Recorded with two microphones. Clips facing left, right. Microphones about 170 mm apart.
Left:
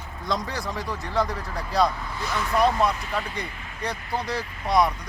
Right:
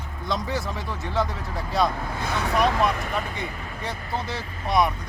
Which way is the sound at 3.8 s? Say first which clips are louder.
Left 2 dB; centre (ahead or behind).